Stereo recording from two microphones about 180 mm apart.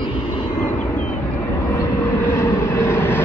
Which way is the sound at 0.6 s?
10° left (ahead or behind).